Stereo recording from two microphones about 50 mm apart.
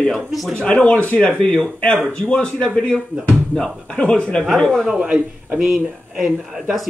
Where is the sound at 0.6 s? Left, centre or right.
Left.